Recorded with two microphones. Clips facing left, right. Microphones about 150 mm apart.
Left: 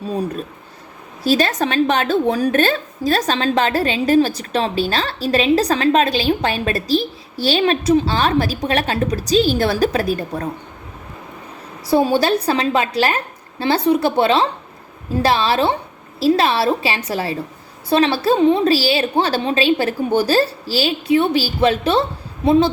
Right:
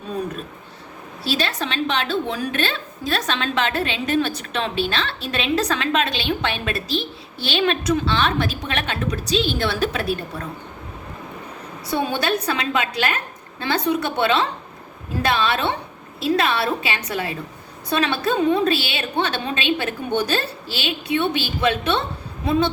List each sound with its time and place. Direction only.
0.1 s a woman's voice: 35° left (ahead or behind)
1.2 s a woman's voice: 45° left (ahead or behind)
11.9 s a woman's voice: 35° left (ahead or behind)